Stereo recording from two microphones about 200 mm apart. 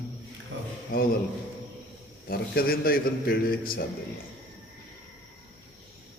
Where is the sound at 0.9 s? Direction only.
45° left (ahead or behind).